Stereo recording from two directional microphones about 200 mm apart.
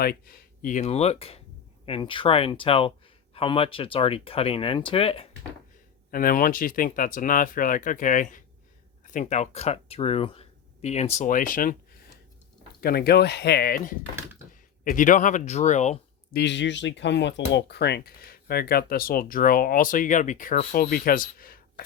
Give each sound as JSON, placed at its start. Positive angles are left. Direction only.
{"t": 0.0, "sound": "speech", "side_deg": 50}
{"t": 6.1, "sound": "speech", "side_deg": 45}
{"t": 12.8, "sound": "speech", "side_deg": 50}
{"t": 16.3, "sound": "speech", "side_deg": 60}